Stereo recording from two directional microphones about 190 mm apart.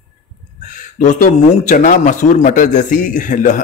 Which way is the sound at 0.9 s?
45° left (ahead or behind).